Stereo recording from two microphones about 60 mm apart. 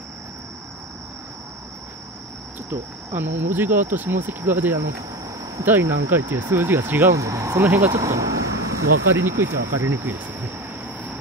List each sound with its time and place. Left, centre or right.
2.7 s speech: right
7.2 s speech: right
7.5 s speech: right
8.0 s a sound: right
9.1 s speech: right